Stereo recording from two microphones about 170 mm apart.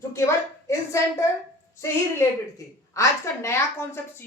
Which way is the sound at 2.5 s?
15° left (ahead or behind).